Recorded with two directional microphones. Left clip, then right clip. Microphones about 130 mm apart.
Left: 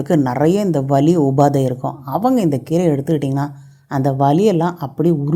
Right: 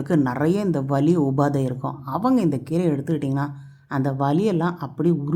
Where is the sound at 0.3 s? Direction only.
25° left (ahead or behind).